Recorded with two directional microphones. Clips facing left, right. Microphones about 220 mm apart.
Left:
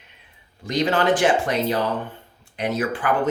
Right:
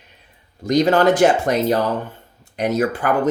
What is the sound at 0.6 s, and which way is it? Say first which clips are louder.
Speech: right 6 dB; 40° right (ahead or behind).